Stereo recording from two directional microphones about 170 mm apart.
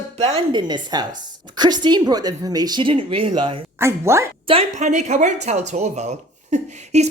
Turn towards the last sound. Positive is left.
turn(degrees=-40)  # may be behind; listen again after turning